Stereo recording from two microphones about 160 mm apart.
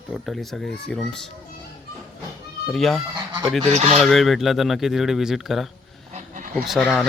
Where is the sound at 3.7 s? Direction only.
45° right (ahead or behind).